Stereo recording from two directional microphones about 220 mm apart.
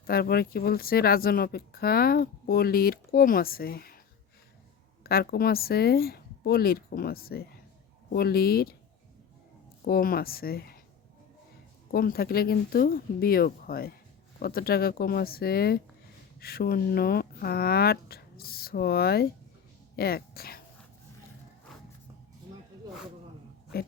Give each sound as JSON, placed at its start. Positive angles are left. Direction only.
{"t": 0.1, "sound": "speech", "side_deg": 45}
{"t": 5.0, "sound": "speech", "side_deg": 45}
{"t": 9.8, "sound": "speech", "side_deg": 40}
{"t": 11.9, "sound": "speech", "side_deg": 40}